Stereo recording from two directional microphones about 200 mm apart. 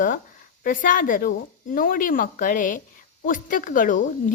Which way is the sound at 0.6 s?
40° left (ahead or behind).